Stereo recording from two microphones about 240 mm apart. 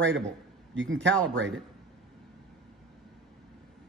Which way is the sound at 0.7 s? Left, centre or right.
Right.